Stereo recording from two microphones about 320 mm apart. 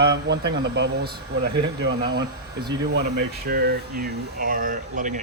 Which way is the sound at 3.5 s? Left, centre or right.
Right.